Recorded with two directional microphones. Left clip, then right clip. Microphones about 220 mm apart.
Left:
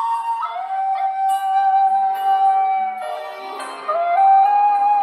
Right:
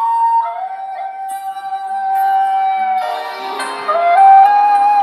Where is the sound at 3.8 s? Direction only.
35° right (ahead or behind).